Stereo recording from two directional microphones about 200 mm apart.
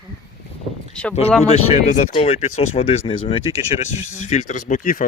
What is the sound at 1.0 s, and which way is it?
Speech, 5° left (ahead or behind).